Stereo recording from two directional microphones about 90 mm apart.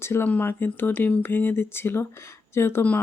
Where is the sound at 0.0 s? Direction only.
30° left (ahead or behind).